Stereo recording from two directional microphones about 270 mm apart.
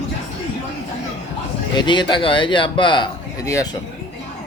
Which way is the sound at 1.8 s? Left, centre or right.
Centre.